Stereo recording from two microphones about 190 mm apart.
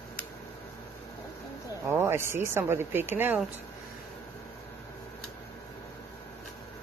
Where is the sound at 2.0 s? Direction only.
10° right (ahead or behind).